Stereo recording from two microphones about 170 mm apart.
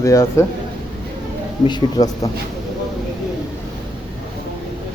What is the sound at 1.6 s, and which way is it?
Speech, 25° left (ahead or behind).